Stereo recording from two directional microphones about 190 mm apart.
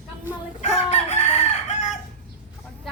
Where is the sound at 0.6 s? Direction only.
35° left (ahead or behind).